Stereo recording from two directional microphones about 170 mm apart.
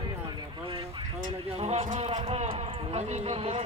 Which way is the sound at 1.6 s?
40° right (ahead or behind).